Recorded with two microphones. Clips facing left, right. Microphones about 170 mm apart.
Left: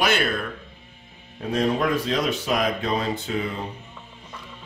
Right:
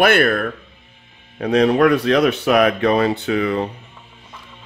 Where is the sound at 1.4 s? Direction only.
75° right (ahead or behind).